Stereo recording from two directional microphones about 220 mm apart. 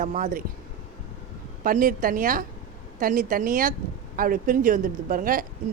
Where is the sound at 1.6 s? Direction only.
40° right (ahead or behind).